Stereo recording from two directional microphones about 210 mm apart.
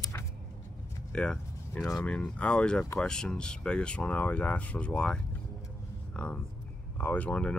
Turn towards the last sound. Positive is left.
turn(degrees=5)  # may be behind; listen again after turning